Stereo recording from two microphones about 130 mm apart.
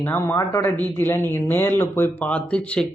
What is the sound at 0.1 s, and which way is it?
Speech, 20° left (ahead or behind).